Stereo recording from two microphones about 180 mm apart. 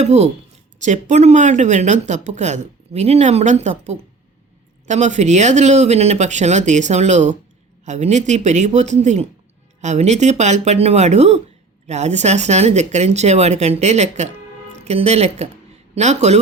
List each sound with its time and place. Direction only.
0.0 s speech: 40° right (ahead or behind)